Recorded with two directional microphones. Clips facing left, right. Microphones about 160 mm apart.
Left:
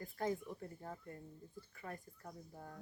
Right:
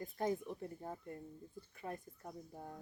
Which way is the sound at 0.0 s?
25° right (ahead or behind).